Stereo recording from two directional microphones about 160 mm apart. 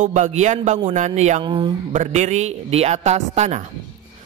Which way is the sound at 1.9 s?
50° right (ahead or behind).